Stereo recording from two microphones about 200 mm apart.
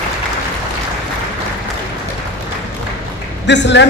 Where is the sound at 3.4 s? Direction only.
60° left (ahead or behind).